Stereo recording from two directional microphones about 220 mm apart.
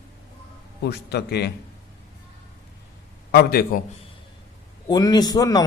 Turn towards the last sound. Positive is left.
turn(degrees=15)  # may be behind; listen again after turning